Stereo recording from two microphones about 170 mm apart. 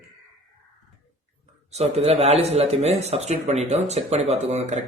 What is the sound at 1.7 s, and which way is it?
Speech, 40° right (ahead or behind).